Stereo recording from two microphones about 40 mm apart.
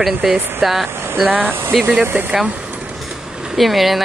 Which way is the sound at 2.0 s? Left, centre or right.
Right.